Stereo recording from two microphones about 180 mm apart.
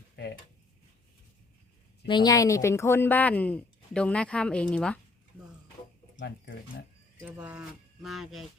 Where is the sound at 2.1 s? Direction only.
25° left (ahead or behind); by 5.0 s 5° left (ahead or behind).